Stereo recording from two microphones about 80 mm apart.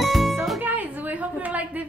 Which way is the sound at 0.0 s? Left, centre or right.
Centre.